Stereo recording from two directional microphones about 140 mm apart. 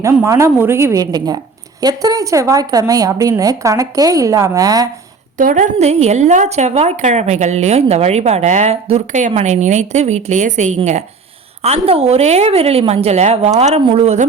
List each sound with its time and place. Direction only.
0.0 s speech: 20° right (ahead or behind)
5.4 s a woman's voice: 65° right (ahead or behind)
11.6 s a woman's voice: 45° right (ahead or behind)